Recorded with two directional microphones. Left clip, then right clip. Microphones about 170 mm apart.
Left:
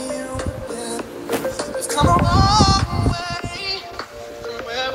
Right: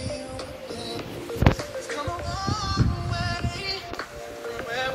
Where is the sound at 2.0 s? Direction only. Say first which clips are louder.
Left 18 dB; 55° left (ahead or behind).